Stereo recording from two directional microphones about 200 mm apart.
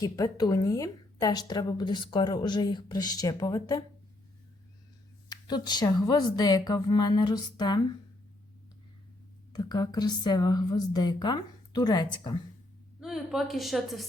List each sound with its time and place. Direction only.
0.0 s a woman's voice: 20° left (ahead or behind)
5.3 s a woman's voice: 20° left (ahead or behind)
9.5 s a woman's voice: 20° left (ahead or behind)
13.0 s a woman's voice: centre (ahead or behind)